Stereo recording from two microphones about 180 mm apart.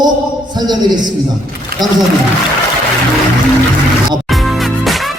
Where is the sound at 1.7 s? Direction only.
55° right (ahead or behind).